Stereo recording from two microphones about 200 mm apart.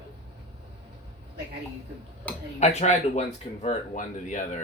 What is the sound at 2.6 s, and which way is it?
Speech, 35° left (ahead or behind).